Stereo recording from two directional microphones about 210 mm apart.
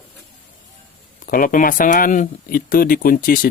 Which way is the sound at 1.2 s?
40° left (ahead or behind).